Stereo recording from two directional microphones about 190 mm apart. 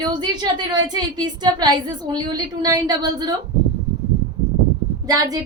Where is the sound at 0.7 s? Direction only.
20° right (ahead or behind).